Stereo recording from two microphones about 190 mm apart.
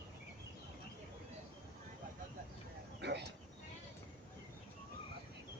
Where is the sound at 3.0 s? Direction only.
60° right (ahead or behind).